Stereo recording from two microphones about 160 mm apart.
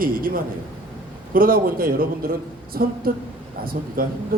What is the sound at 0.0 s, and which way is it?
A man's voice, 60° right (ahead or behind).